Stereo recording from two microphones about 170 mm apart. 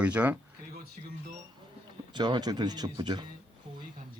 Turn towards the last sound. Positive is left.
turn(degrees=-25)  # may be behind; listen again after turning